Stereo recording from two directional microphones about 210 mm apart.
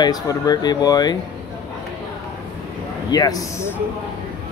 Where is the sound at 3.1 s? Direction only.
20° left (ahead or behind).